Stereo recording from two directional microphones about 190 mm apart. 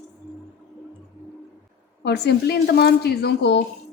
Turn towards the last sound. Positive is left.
turn(degrees=60)  # may be behind; listen again after turning